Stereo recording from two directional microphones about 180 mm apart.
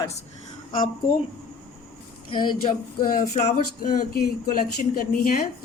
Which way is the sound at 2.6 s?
50° left (ahead or behind).